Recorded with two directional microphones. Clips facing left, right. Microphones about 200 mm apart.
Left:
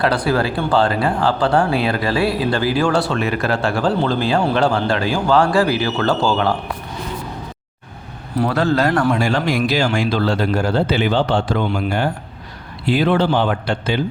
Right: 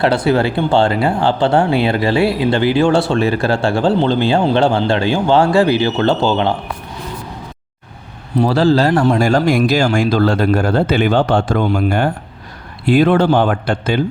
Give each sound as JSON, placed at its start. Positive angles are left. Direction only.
{"t": 0.0, "sound": "speech", "side_deg": -25}
{"t": 8.4, "sound": "speech", "side_deg": -30}
{"t": 9.1, "sound": "speech", "side_deg": -45}